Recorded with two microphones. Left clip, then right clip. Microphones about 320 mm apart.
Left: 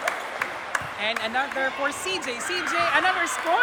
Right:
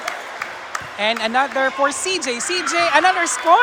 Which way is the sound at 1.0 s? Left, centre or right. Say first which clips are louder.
Right 9 dB; centre.